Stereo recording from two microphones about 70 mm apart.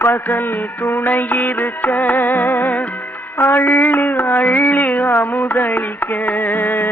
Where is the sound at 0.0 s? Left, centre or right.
Left.